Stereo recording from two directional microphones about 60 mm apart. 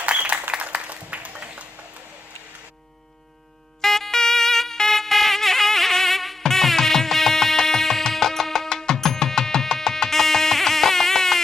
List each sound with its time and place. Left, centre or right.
0.0 s applause: right
3.8 s music: centre